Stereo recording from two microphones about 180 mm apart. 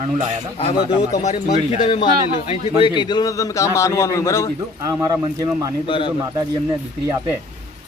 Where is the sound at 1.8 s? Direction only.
25° left (ahead or behind).